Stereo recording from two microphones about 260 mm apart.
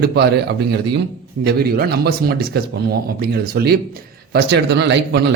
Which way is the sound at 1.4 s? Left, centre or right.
Right.